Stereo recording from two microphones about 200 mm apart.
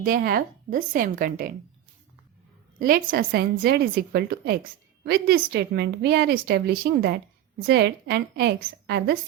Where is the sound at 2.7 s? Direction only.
45° right (ahead or behind).